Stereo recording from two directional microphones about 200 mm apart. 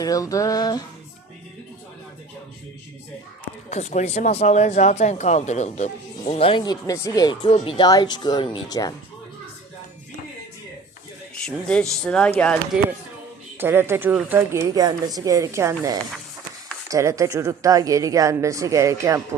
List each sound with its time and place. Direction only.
0.0 s music: 15° left (ahead or behind)
3.7 s speech: 35° left (ahead or behind)
11.4 s speech: 5° left (ahead or behind)
13.6 s speech: 10° right (ahead or behind)
16.1 s a sound: centre (ahead or behind)
16.9 s speech: 15° right (ahead or behind)